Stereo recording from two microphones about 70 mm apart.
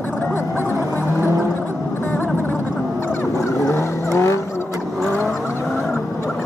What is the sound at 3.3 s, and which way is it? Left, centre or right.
Vehicle, left.